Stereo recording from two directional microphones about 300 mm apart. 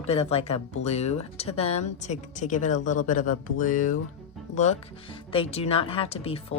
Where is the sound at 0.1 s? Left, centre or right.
Centre.